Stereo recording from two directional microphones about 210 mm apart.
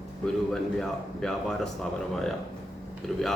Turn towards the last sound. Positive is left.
turn(degrees=0)  # may be behind; listen again after turning